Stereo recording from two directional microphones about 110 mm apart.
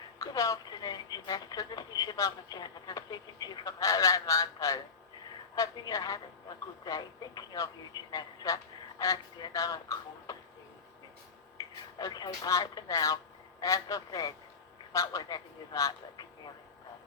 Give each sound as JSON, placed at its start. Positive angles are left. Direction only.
{"t": 0.2, "sound": "speech", "side_deg": 30}
{"t": 11.7, "sound": "speech", "side_deg": 35}